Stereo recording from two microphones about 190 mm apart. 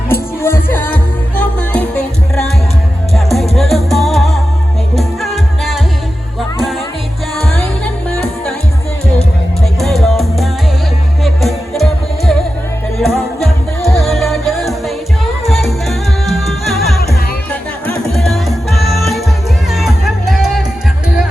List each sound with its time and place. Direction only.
0.1 s music: 10° left (ahead or behind)
3.5 s music: centre (ahead or behind)
9.8 s music: centre (ahead or behind)